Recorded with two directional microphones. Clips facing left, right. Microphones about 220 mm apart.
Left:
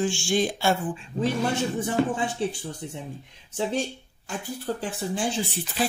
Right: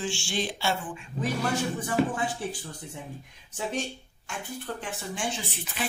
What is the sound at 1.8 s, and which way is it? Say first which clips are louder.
Speech: left 1 dB; 25° left (ahead or behind).